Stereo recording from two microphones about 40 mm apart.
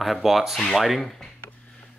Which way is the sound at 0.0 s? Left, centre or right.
Centre.